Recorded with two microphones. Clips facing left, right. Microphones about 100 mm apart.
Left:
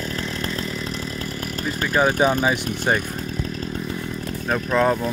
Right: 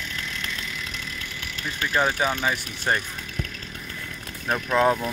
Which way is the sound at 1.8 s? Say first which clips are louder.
Left 5 dB; 10° left (ahead or behind).